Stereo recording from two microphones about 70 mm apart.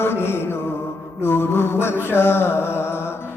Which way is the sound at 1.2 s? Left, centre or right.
Left.